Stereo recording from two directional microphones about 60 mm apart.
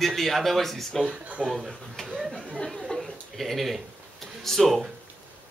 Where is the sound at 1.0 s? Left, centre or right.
Right.